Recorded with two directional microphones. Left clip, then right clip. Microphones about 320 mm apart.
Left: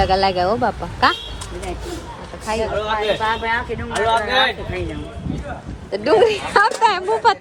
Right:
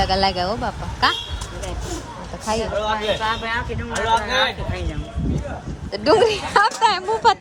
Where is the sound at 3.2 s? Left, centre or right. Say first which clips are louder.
Left 3 dB; centre.